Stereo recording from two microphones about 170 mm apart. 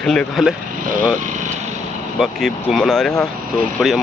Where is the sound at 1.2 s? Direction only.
50° right (ahead or behind).